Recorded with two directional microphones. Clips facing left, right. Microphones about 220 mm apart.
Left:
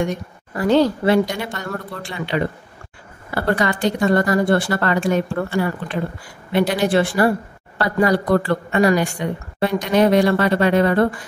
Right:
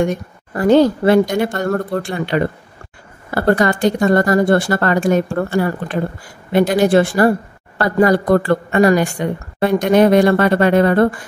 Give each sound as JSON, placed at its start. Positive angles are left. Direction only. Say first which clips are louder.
{"t": 0.0, "sound": "speech", "louder": "right 4 dB", "side_deg": -50}